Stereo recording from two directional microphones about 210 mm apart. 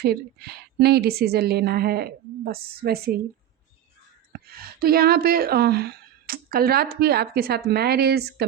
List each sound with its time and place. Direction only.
0.0 s a woman's voice: 50° right (ahead or behind)
4.3 s a woman's voice: 45° right (ahead or behind)